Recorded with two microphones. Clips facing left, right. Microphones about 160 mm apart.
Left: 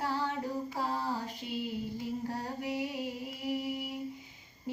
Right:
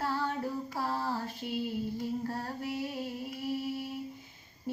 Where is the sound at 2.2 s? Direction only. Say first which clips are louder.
Even; 15° left (ahead or behind).